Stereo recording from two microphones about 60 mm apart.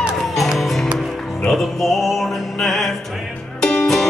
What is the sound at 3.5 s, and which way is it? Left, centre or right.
Music, centre.